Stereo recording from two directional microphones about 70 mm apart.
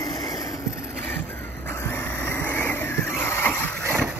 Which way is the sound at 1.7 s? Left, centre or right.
Left.